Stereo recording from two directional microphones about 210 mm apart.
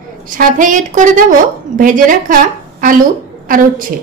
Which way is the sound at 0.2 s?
40° right (ahead or behind).